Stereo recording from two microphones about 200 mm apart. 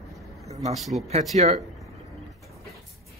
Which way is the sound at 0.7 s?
Centre (ahead or behind).